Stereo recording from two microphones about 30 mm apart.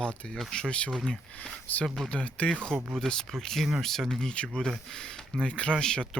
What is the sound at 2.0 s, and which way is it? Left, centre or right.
Speech, left.